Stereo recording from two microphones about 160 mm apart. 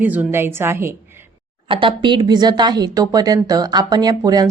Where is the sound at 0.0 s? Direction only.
10° right (ahead or behind).